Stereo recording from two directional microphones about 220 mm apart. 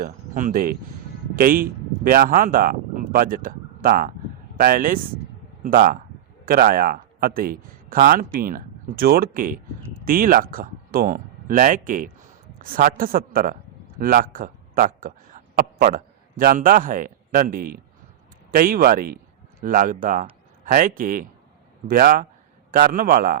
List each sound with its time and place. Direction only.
0.0 s a man's voice: 40° right (ahead or behind)